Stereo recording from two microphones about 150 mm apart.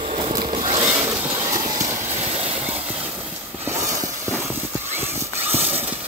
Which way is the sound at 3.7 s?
20° right (ahead or behind).